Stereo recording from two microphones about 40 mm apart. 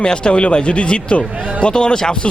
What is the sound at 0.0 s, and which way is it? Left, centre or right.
Speech, left.